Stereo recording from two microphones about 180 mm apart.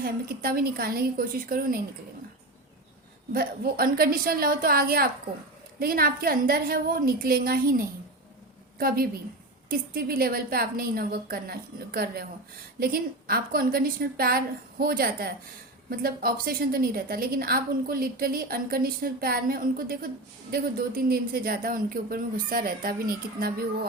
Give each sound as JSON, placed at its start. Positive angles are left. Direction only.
{"t": 0.0, "sound": "a woman's voice", "side_deg": -55}
{"t": 3.3, "sound": "a woman's voice", "side_deg": -55}
{"t": 9.6, "sound": "a woman's voice", "side_deg": -55}